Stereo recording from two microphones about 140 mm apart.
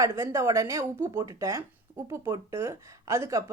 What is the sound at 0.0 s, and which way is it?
A woman's voice, 20° right (ahead or behind).